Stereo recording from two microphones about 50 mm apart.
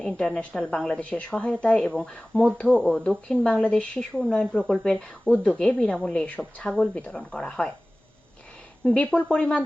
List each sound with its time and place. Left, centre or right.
0.0 s speech: centre
0.9 s speech: left
4.7 s speech: centre
4.9 s speech: left
8.8 s speech: centre